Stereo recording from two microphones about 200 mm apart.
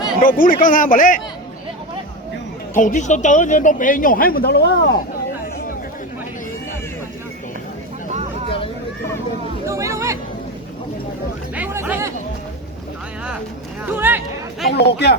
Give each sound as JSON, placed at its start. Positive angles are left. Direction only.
{"t": 0.2, "sound": "a man's voice", "side_deg": 45}
{"t": 2.7, "sound": "speech", "side_deg": 40}
{"t": 8.1, "sound": "a sound", "side_deg": -30}
{"t": 9.6, "sound": "hubbub", "side_deg": -15}
{"t": 11.5, "sound": "chatter", "side_deg": -10}
{"t": 13.8, "sound": "a sound", "side_deg": -10}
{"t": 14.7, "sound": "speech", "side_deg": 55}